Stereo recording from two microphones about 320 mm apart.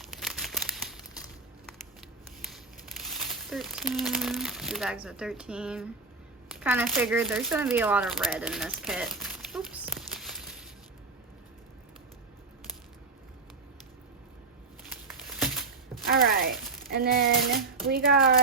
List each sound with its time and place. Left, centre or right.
0.0 s crumpling: centre
2.4 s speech: centre
15.3 s a sound: centre
16.9 s speech: right